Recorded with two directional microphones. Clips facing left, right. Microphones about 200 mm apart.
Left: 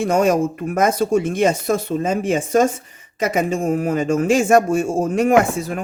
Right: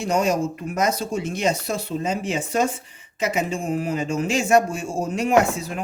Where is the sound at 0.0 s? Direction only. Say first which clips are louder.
Left 5 dB; 55° left (ahead or behind).